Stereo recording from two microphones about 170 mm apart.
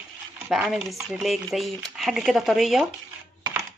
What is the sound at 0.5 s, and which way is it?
Speech, centre (ahead or behind).